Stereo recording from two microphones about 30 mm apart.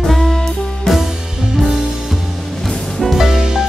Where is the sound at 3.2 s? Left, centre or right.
Centre.